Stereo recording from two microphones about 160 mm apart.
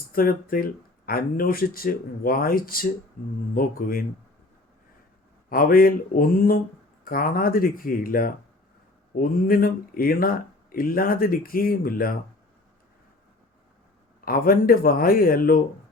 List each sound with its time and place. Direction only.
0.1 s speech: 65° left (ahead or behind)
5.5 s speech: 65° left (ahead or behind)
14.3 s speech: 65° left (ahead or behind)